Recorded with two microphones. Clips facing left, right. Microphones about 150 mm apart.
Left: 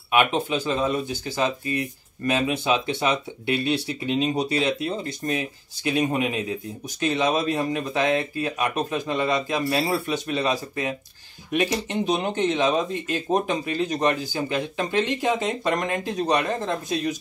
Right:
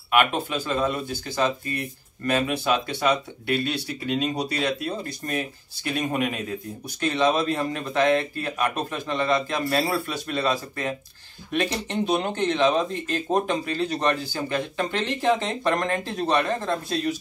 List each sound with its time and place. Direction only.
0.3 s speech: 20° left (ahead or behind)